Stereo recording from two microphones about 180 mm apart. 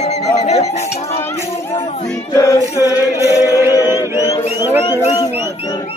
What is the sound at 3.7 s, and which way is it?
Music, 20° left (ahead or behind).